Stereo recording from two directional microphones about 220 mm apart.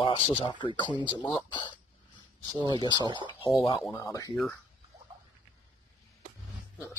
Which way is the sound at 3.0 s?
20° right (ahead or behind).